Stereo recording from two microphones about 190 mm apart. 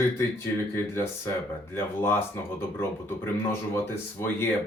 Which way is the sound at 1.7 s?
15° left (ahead or behind).